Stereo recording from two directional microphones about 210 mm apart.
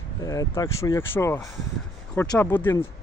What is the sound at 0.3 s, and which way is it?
Speech, 15° left (ahead or behind).